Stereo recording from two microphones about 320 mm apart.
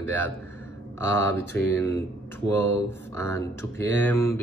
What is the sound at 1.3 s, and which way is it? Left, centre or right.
Speech, centre.